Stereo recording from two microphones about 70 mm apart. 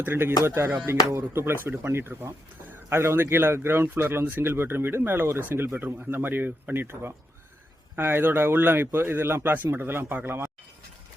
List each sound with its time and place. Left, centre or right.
0.0 s speech: right